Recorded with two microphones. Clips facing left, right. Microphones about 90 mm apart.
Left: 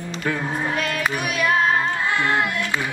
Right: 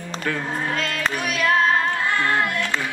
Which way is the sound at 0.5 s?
15° left (ahead or behind).